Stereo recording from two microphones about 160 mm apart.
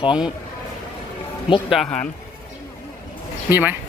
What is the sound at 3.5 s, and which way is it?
Speech, 10° right (ahead or behind).